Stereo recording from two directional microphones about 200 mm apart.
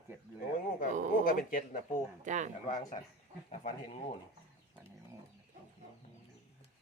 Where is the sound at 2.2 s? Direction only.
40° right (ahead or behind).